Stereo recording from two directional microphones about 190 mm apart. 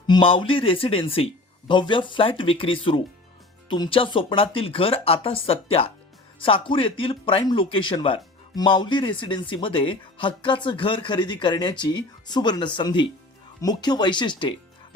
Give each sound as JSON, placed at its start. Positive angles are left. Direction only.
{"t": 0.1, "sound": "speech", "side_deg": 25}